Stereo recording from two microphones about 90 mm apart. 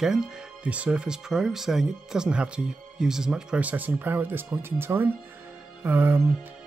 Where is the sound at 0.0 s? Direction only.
5° right (ahead or behind); by 6.2 s 25° right (ahead or behind).